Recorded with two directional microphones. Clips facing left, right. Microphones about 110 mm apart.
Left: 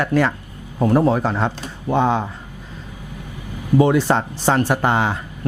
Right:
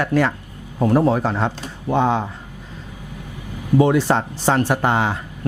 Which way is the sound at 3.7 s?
15° left (ahead or behind).